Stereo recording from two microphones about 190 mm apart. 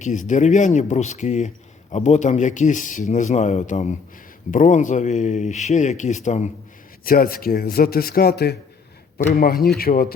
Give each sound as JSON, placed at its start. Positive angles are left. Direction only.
{"t": 0.0, "sound": "speech", "side_deg": 40}
{"t": 7.0, "sound": "speech", "side_deg": 50}